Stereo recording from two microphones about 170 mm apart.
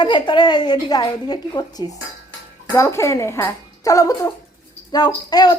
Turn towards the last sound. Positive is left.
turn(degrees=25)  # may be behind; listen again after turning